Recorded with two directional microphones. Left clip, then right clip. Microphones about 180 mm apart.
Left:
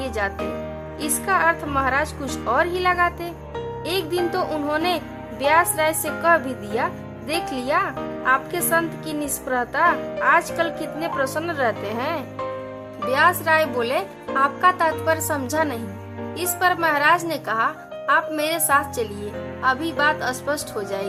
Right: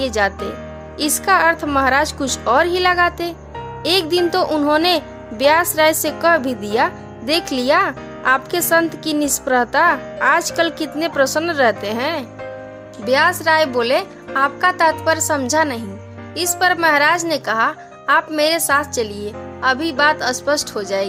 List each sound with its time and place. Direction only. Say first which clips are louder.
0.0 s speech: right 7 dB; 35° right (ahead or behind)